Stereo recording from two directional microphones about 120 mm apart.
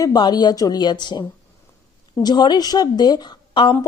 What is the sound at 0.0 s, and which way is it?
A woman's voice, 35° left (ahead or behind).